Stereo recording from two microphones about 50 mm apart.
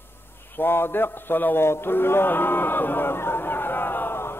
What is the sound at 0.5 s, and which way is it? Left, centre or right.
Speech, left.